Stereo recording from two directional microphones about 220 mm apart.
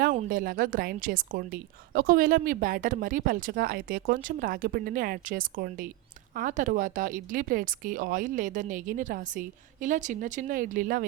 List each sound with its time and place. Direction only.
0.0 s a woman's voice: 40° right (ahead or behind)